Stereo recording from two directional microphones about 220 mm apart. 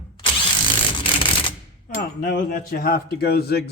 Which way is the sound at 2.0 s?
40° left (ahead or behind).